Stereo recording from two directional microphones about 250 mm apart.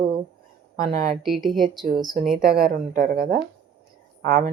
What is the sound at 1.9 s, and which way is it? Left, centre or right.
A woman's voice, right.